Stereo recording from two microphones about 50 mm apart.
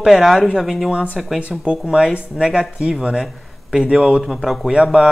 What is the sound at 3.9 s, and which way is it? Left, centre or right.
Speech, centre.